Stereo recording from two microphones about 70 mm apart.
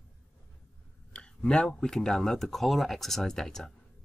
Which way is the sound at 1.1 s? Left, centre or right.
Centre.